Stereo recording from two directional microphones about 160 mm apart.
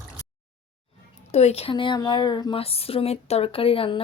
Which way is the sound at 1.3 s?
40° left (ahead or behind).